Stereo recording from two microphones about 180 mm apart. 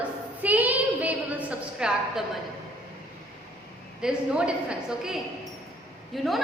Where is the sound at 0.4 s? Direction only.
10° right (ahead or behind).